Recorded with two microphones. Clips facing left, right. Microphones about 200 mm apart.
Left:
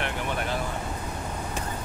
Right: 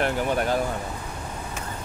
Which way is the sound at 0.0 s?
40° right (ahead or behind).